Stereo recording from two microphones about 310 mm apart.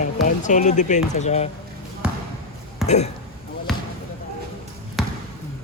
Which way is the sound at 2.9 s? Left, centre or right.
Left.